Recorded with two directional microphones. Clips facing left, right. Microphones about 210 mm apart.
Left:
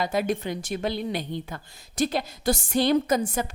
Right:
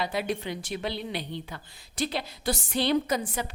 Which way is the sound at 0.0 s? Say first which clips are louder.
Left 4 dB; 45° left (ahead or behind).